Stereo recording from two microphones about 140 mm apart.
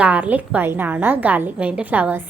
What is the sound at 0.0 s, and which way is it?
A woman's voice, 10° right (ahead or behind).